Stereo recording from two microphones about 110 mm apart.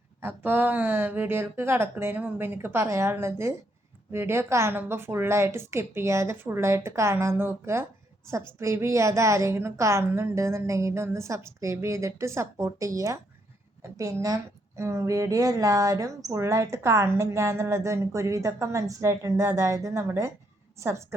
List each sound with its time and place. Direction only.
0.2 s a woman's voice: 20° right (ahead or behind)